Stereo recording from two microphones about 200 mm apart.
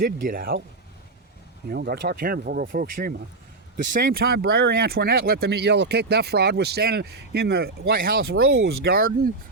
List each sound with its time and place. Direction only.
0.0 s speech: 45° right (ahead or behind)
1.7 s speech: 50° right (ahead or behind)